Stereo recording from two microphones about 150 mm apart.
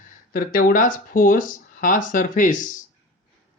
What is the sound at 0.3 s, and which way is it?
Speech, 70° left (ahead or behind).